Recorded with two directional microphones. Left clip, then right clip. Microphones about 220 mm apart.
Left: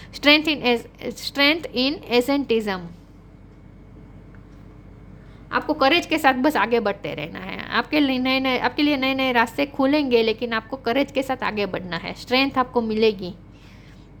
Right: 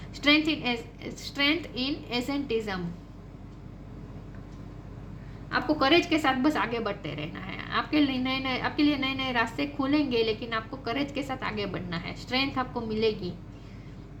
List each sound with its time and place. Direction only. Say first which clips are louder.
0.1 s a woman's voice: left 7 dB; 50° left (ahead or behind)
5.5 s a woman's voice: left 5 dB; 50° left (ahead or behind)